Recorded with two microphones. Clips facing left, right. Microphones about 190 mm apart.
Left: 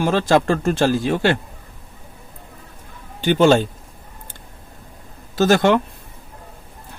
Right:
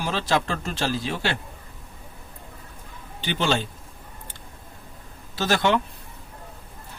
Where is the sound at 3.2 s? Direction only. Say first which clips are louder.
Left 11 dB; 45° left (ahead or behind).